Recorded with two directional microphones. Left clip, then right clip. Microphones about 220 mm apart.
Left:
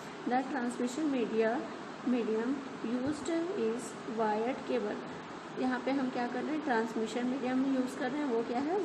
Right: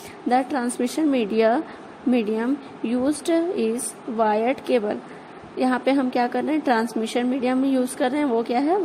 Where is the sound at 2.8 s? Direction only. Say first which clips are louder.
Right 12 dB; 45° right (ahead or behind).